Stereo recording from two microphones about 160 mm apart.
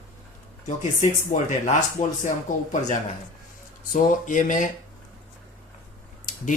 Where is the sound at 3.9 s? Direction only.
55° left (ahead or behind).